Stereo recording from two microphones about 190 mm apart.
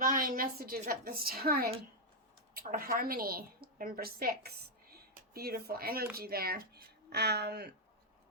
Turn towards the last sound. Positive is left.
turn(degrees=-60)  # may be behind; listen again after turning